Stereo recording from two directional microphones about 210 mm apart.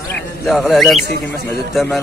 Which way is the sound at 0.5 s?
Centre (ahead or behind).